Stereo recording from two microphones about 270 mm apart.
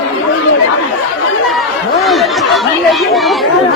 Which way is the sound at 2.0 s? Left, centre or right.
Centre.